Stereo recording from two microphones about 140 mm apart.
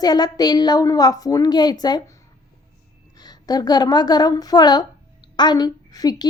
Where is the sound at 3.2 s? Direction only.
30° left (ahead or behind).